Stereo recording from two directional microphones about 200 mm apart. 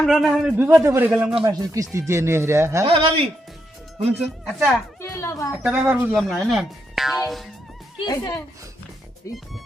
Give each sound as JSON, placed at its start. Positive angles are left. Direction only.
{"t": 0.0, "sound": "a man's voice", "side_deg": 0}
{"t": 1.5, "sound": "speech", "side_deg": -15}
{"t": 2.8, "sound": "speech", "side_deg": -25}
{"t": 4.2, "sound": "a man's voice", "side_deg": 0}
{"t": 4.9, "sound": "a child's voice", "side_deg": 15}
{"t": 5.6, "sound": "a man's voice", "side_deg": -10}
{"t": 8.0, "sound": "speech", "side_deg": 20}